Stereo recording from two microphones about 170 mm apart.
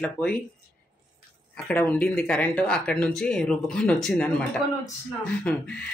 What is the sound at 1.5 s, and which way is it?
Speech, 10° left (ahead or behind).